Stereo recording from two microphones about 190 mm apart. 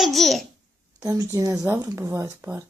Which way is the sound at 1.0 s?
20° right (ahead or behind).